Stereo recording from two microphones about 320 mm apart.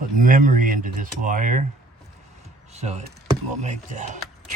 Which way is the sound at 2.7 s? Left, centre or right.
Right.